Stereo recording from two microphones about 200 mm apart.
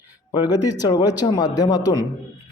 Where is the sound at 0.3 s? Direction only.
20° left (ahead or behind).